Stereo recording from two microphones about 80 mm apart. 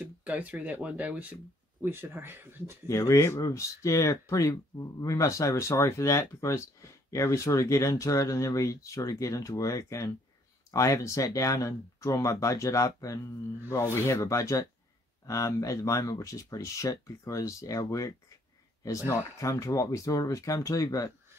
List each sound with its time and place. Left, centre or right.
0.0 s speech: centre
1.8 s speech: right
2.9 s speech: left